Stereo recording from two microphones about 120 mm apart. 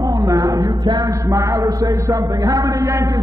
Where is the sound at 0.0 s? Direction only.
30° right (ahead or behind).